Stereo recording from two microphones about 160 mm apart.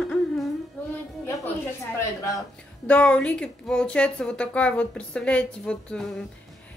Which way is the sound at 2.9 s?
10° left (ahead or behind).